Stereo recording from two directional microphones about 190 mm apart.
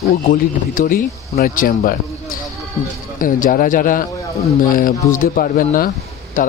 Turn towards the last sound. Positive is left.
turn(degrees=45)  # may be behind; listen again after turning